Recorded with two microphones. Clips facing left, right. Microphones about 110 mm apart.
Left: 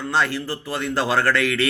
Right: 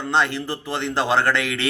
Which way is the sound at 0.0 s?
20° right (ahead or behind).